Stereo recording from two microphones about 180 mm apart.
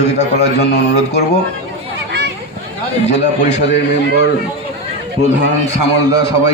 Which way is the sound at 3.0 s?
40° left (ahead or behind).